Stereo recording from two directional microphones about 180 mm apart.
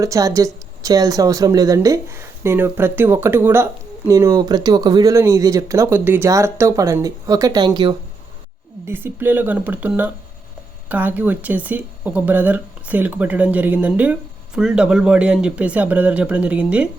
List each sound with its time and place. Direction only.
0.0 s speech: 20° right (ahead or behind)
8.9 s speech: 10° right (ahead or behind)